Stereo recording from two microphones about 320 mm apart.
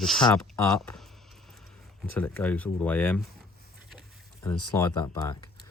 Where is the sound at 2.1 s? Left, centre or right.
Centre.